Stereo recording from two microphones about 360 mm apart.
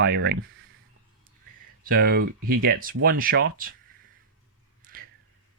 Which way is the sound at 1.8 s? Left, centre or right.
Right.